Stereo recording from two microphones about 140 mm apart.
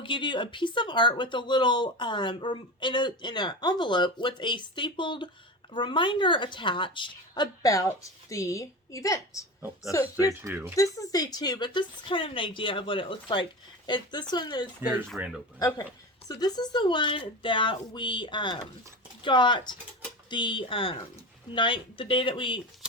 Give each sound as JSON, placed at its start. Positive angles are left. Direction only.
{"t": 0.0, "sound": "speech", "side_deg": 35}
{"t": 10.4, "sound": "speech", "side_deg": -15}
{"t": 10.8, "sound": "speech", "side_deg": 25}
{"t": 14.8, "sound": "speech", "side_deg": -15}
{"t": 15.5, "sound": "speech", "side_deg": 25}